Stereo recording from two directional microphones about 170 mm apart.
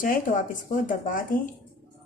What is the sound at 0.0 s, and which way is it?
Speech, 50° left (ahead or behind).